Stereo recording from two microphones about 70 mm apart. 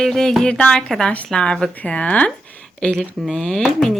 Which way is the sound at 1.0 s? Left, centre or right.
Centre.